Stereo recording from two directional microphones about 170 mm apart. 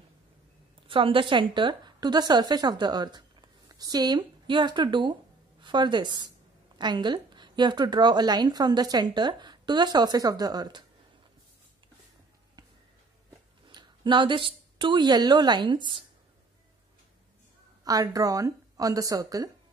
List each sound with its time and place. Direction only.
0.8 s a woman's voice: 30° right (ahead or behind)
13.7 s a woman's voice: 25° right (ahead or behind)
17.8 s speech: 20° right (ahead or behind)